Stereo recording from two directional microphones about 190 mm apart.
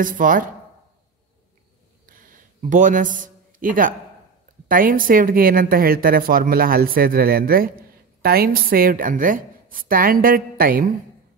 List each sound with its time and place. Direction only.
0.0 s speech: 45° right (ahead or behind)
2.0 s a sound: 45° right (ahead or behind)
4.6 s speech: 45° right (ahead or behind)